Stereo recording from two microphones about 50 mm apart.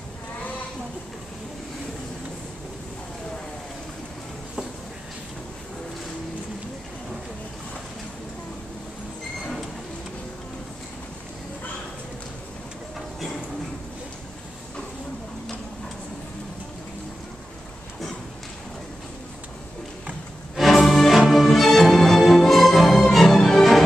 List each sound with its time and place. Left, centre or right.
20.5 s music: centre